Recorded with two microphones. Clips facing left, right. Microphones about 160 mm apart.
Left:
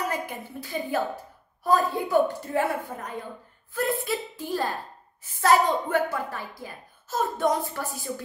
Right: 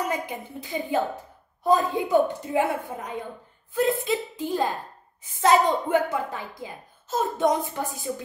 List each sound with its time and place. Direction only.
0.1 s a woman's voice: 20° right (ahead or behind)